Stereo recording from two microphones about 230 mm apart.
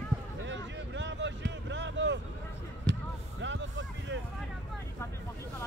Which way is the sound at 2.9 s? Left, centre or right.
Right.